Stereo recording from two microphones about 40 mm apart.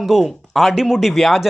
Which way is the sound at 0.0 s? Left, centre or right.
Centre.